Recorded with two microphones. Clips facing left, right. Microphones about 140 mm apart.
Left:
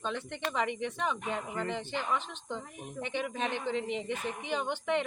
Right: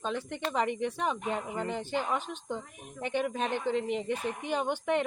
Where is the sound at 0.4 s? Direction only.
40° right (ahead or behind).